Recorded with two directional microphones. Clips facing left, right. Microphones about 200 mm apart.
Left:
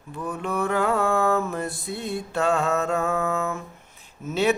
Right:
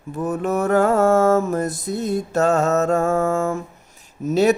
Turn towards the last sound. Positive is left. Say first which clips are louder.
# right 6 dB
turn(degrees=-40)  # may be behind; listen again after turning